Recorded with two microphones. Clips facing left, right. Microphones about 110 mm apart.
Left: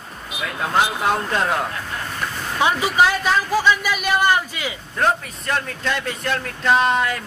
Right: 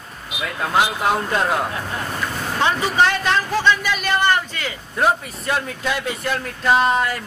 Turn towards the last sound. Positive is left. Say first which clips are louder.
# right 1 dB
turn(degrees=-5)  # may be behind; listen again after turning